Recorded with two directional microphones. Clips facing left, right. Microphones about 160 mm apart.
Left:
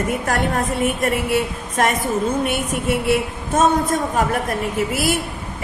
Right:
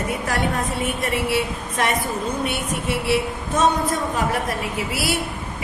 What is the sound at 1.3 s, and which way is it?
A woman's voice, 45° left (ahead or behind).